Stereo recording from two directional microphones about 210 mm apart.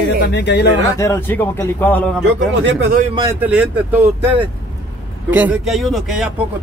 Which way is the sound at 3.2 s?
15° right (ahead or behind).